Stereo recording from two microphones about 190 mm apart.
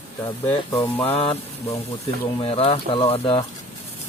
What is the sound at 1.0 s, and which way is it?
Speech, 30° left (ahead or behind).